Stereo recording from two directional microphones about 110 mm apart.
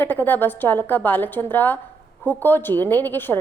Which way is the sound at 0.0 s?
20° left (ahead or behind).